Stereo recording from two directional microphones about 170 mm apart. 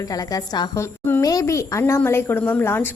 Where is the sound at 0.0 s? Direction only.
20° left (ahead or behind).